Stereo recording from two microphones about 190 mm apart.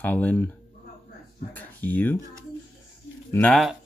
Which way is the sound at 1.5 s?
10° left (ahead or behind).